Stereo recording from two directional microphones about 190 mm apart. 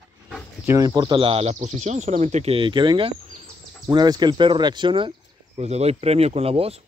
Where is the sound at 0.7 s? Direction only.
20° right (ahead or behind).